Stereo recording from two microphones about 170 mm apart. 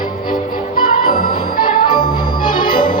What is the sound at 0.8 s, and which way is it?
Music, 55° left (ahead or behind).